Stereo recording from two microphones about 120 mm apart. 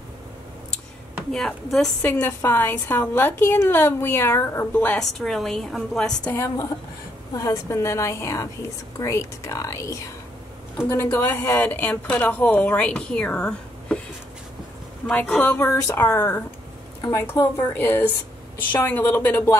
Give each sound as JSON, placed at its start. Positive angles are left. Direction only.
{"t": 1.3, "sound": "a woman's voice", "side_deg": 5}
{"t": 2.0, "sound": "a woman's voice", "side_deg": 20}
{"t": 4.7, "sound": "a woman's voice", "side_deg": 10}
{"t": 7.3, "sound": "a woman's voice", "side_deg": 30}
{"t": 11.0, "sound": "speech", "side_deg": 15}
{"t": 15.0, "sound": "speech", "side_deg": 15}